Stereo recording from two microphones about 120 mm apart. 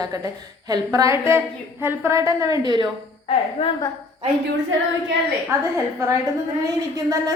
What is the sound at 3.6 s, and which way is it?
Speech, 60° left (ahead or behind).